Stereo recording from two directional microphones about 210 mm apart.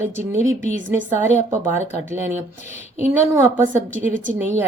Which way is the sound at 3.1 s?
15° right (ahead or behind).